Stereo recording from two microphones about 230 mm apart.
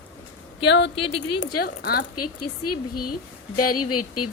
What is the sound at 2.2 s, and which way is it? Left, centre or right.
Speech, left.